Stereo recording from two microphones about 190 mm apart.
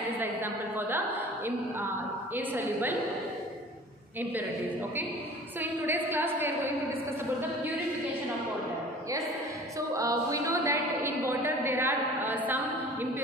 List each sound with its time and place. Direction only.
0.2 s a sound: 10° right (ahead or behind)
1.1 s a woman's voice: 10° right (ahead or behind)
4.2 s a woman's voice: 10° right (ahead or behind)
9.8 s a woman's voice: 15° right (ahead or behind)